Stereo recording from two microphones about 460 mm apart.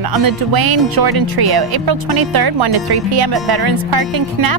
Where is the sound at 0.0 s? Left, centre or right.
Right.